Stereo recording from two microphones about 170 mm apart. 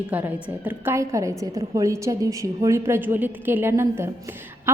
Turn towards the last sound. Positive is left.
turn(degrees=-15)  # may be behind; listen again after turning